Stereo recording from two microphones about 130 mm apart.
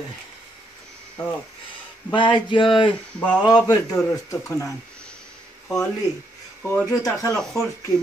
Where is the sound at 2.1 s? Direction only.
40° left (ahead or behind).